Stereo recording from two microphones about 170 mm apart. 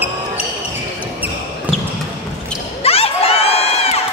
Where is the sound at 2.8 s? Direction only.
35° left (ahead or behind).